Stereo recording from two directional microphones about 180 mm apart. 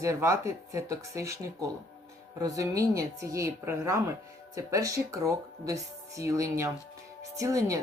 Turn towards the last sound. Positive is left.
turn(degrees=-20)  # may be behind; listen again after turning